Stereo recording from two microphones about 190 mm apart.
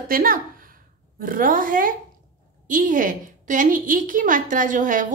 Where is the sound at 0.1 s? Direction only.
50° right (ahead or behind).